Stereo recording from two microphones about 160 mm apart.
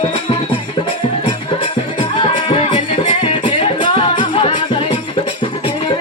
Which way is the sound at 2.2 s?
35° left (ahead or behind).